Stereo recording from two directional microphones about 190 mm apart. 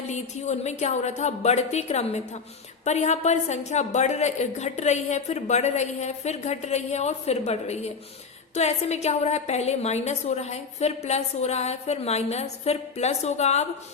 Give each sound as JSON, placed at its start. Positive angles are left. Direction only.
{"t": 0.1, "sound": "a woman's voice", "side_deg": 35}